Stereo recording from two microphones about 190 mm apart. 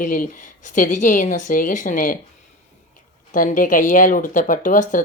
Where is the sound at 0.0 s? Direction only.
45° left (ahead or behind).